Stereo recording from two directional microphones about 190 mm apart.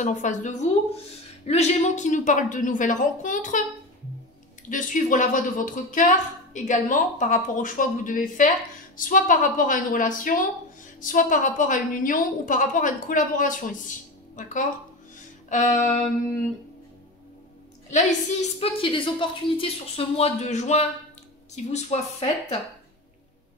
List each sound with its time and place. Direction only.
0.0 s a woman's voice: 40° left (ahead or behind)
4.6 s a woman's voice: 45° left (ahead or behind)
17.9 s a woman's voice: 35° left (ahead or behind)